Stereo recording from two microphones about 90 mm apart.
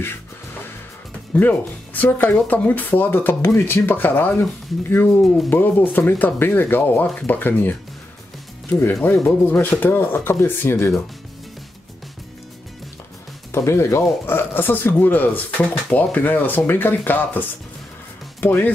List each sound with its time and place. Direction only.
1.3 s speech: 20° left (ahead or behind)
9.0 s speech: 25° left (ahead or behind)
13.5 s speech: 30° left (ahead or behind)